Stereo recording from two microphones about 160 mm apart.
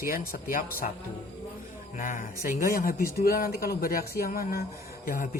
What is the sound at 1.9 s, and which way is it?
A man's voice, 55° left (ahead or behind).